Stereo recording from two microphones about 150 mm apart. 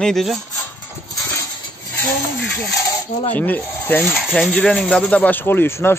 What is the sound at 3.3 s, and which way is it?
Speech, 10° left (ahead or behind).